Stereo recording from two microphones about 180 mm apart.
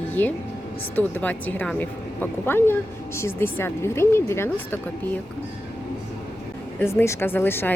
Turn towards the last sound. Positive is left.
turn(degrees=10)  # may be behind; listen again after turning